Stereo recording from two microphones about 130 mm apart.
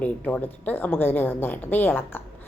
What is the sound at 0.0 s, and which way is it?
A woman's voice, 10° left (ahead or behind).